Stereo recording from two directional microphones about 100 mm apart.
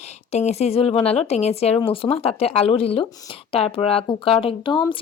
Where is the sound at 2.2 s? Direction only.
85° left; by 5.0 s 60° left (ahead or behind).